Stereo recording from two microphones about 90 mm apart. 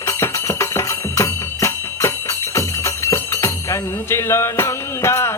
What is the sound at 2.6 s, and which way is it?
Jingle bell, 35° left (ahead or behind).